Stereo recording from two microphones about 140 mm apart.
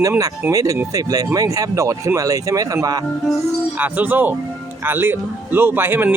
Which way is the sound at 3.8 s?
10° right (ahead or behind).